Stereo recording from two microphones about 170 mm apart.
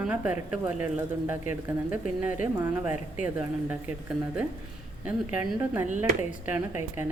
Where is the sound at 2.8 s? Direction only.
45° left (ahead or behind).